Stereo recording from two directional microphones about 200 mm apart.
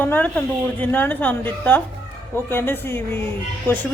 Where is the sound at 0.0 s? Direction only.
10° left (ahead or behind).